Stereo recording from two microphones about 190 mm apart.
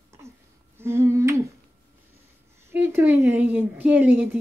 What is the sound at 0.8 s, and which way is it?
Speech, 15° right (ahead or behind).